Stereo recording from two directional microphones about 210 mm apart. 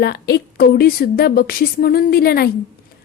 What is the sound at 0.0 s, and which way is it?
A woman's voice, 50° left (ahead or behind).